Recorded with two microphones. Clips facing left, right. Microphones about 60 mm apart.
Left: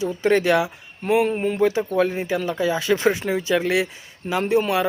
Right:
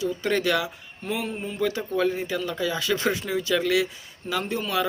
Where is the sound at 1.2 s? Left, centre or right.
Left.